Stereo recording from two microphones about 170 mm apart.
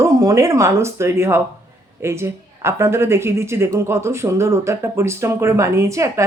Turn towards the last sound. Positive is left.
turn(degrees=-20)  # may be behind; listen again after turning